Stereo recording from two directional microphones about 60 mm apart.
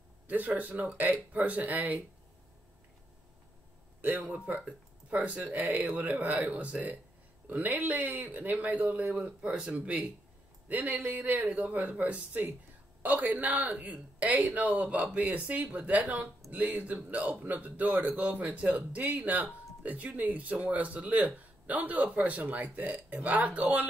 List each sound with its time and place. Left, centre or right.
0.3 s speech: right
4.0 s speech: right